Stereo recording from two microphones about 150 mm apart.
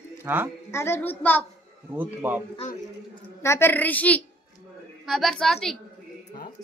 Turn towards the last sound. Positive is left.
turn(degrees=0)  # may be behind; listen again after turning